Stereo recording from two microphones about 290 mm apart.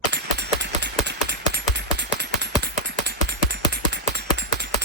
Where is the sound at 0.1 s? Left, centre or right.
Right.